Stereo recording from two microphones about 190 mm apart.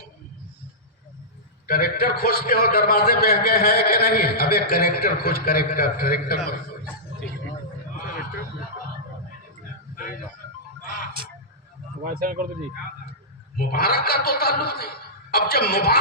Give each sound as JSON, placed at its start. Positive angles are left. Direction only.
{"t": 1.6, "sound": "a man's voice", "side_deg": 50}
{"t": 12.0, "sound": "speech", "side_deg": -45}
{"t": 13.6, "sound": "a man's voice", "side_deg": 50}